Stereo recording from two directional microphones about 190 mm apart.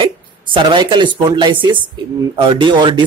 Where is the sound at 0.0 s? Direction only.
25° right (ahead or behind).